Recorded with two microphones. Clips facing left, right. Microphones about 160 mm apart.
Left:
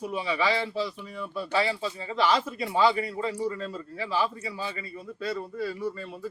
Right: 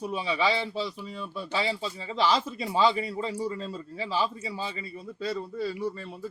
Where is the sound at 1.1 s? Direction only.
25° right (ahead or behind).